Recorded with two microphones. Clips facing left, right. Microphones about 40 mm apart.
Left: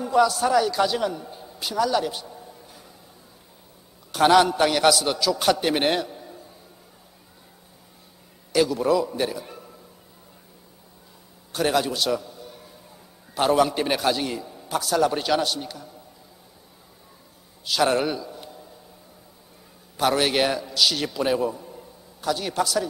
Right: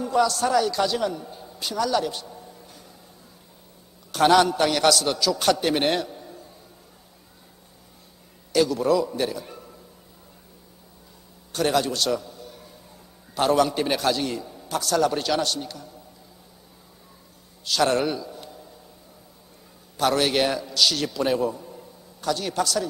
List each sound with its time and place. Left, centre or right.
0.0 s a man's voice: centre
4.1 s a man's voice: centre
8.5 s a man's voice: centre
11.5 s a man's voice: centre
17.6 s a man's voice: centre
20.0 s a man's voice: centre